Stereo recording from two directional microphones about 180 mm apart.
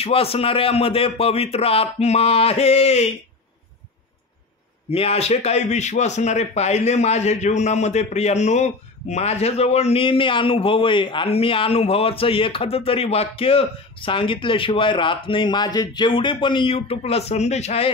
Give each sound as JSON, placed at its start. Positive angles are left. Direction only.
{"t": 0.0, "sound": "a man's voice", "side_deg": 30}
{"t": 4.9, "sound": "a man's voice", "side_deg": 35}